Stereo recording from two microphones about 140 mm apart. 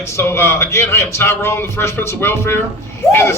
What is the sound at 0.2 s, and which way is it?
Speech, 15° left (ahead or behind).